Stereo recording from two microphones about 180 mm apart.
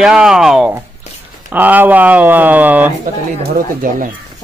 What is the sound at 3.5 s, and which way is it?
Speech, 50° right (ahead or behind).